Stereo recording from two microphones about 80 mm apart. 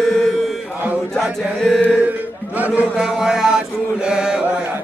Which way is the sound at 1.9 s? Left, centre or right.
Centre.